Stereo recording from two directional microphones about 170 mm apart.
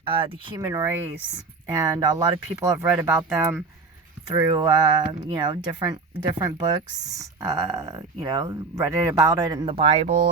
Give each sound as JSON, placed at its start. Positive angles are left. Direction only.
{"t": 0.0, "sound": "speech", "side_deg": -30}
{"t": 7.1, "sound": "speech", "side_deg": -20}